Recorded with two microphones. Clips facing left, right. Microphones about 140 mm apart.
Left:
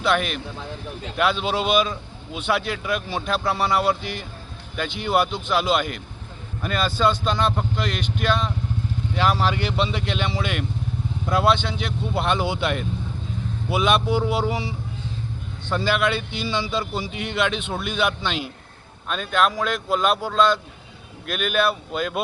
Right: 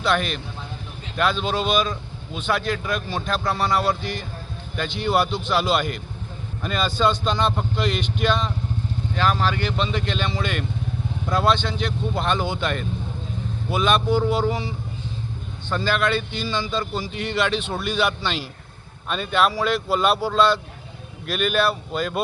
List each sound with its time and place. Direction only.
0.0 s speech: 5° left (ahead or behind)
15.7 s speech: 10° left (ahead or behind)